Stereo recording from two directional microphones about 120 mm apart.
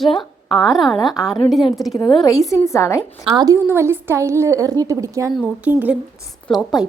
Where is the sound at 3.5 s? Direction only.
20° right (ahead or behind).